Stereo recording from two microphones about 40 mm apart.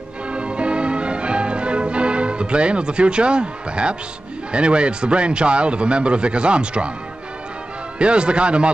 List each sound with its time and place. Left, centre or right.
0.3 s music: right
4.5 s a man's voice: right
8.0 s a man's voice: right